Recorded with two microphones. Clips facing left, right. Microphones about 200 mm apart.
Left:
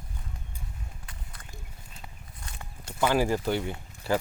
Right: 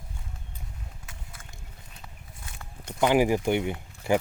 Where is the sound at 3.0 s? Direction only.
15° right (ahead or behind).